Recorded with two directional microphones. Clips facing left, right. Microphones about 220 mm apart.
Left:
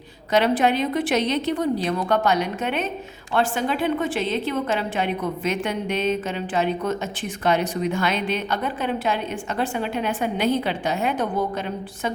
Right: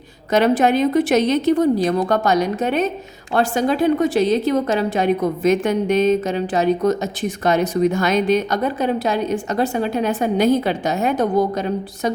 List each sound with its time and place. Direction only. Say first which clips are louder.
0.3 s a woman's voice: right 4 dB; 45° right (ahead or behind)